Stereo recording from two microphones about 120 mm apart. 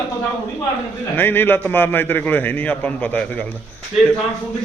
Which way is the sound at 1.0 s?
15° left (ahead or behind).